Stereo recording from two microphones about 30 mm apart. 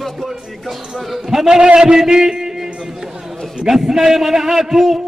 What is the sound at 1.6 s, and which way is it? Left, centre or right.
Speech, right.